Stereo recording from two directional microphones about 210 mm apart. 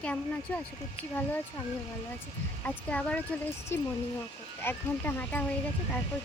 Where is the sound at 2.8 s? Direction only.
5° left (ahead or behind).